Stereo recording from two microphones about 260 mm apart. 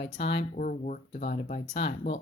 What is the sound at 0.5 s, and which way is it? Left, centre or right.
Speech, left.